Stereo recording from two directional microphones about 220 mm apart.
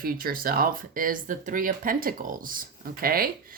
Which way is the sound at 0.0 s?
40° right (ahead or behind).